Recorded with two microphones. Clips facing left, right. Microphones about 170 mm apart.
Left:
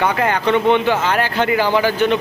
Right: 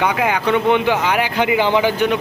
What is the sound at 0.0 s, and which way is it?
Speech, 10° right (ahead or behind).